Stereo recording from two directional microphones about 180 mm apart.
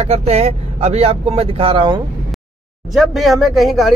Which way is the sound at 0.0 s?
35° right (ahead or behind).